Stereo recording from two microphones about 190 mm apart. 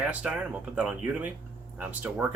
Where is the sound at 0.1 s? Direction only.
5° right (ahead or behind).